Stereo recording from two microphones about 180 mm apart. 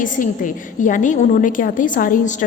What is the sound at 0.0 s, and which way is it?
A woman's voice, 45° left (ahead or behind).